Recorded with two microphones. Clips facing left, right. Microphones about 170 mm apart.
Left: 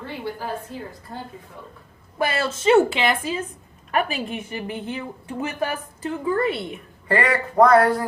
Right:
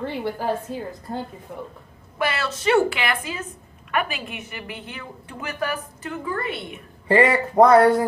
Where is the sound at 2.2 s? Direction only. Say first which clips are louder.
Left 2 dB; 25° left (ahead or behind).